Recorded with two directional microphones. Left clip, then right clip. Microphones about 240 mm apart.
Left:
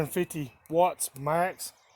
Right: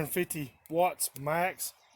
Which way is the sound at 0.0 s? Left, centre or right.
Left.